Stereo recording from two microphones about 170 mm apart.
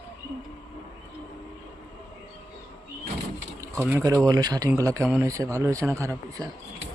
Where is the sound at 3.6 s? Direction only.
15° right (ahead or behind).